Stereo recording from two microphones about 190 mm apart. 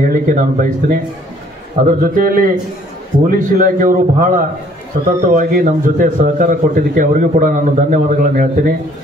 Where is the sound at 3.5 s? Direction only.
45° right (ahead or behind).